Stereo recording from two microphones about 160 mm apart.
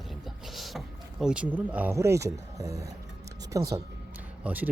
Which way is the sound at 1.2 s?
5° right (ahead or behind).